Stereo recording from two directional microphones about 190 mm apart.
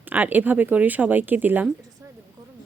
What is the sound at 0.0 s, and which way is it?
Speech, 10° right (ahead or behind).